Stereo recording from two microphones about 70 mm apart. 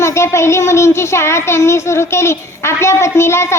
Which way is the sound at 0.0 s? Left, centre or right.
Left.